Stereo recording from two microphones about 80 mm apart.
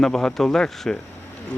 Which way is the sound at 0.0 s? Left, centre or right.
Centre.